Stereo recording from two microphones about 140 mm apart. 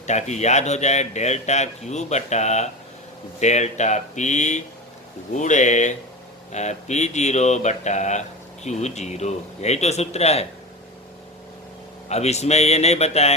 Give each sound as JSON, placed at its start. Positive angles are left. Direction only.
{"t": 0.1, "sound": "a man's voice", "side_deg": 55}
{"t": 12.0, "sound": "a man's voice", "side_deg": 50}